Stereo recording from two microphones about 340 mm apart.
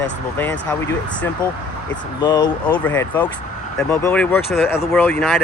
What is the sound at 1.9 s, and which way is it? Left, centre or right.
Speech, centre.